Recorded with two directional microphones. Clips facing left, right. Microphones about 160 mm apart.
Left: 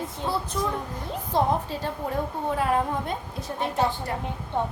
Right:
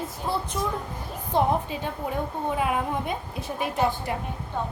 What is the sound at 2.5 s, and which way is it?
Speech, 10° right (ahead or behind).